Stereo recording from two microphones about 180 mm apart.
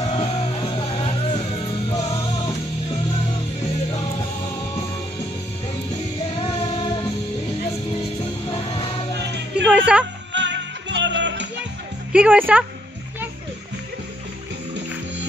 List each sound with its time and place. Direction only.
0.1 s music: 25° left (ahead or behind)
8.5 s music: 30° left (ahead or behind)
9.7 s a sound: 5° right (ahead or behind)
10.3 s music: 85° right
12.1 s speech: 5° right (ahead or behind)